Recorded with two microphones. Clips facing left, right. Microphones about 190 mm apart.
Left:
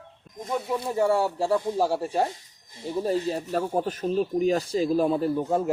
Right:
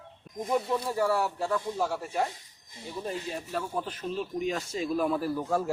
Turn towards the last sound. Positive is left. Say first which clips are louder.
# left 4 dB
turn(degrees=20)  # may be behind; listen again after turning